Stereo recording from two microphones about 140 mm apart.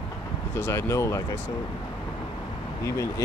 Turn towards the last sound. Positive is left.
turn(degrees=20)  # may be behind; listen again after turning